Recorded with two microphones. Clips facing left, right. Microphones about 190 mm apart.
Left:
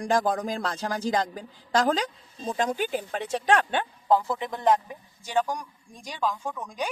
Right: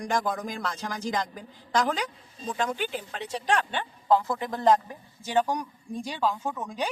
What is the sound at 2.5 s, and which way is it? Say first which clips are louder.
Speech: left 3 dB; 40° left (ahead or behind).